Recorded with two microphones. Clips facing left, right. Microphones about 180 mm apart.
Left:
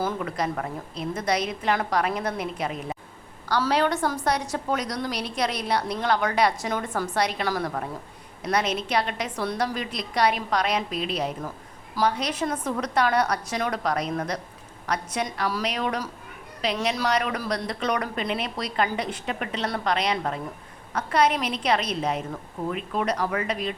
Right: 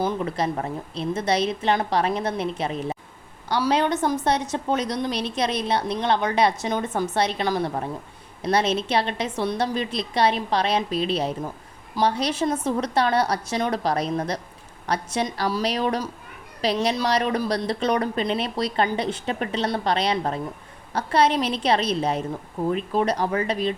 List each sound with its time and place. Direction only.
0.0 s a woman's voice: 25° right (ahead or behind)